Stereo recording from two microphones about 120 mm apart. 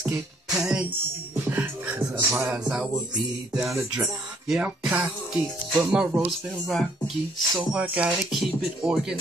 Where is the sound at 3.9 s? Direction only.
5° right (ahead or behind).